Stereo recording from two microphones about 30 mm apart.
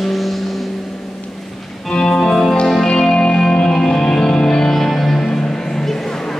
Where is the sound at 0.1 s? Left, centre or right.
Centre.